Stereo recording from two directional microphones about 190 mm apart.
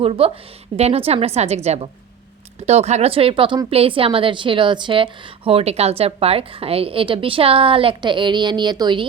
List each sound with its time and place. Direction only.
0.0 s a woman's voice: 30° right (ahead or behind)